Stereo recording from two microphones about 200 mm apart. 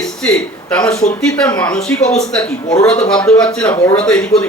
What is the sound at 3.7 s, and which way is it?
Speech, 15° left (ahead or behind).